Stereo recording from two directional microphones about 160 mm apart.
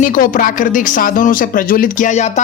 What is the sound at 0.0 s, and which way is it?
Speech, 60° left (ahead or behind).